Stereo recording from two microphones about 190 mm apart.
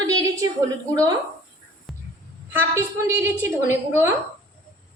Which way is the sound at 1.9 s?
Centre (ahead or behind).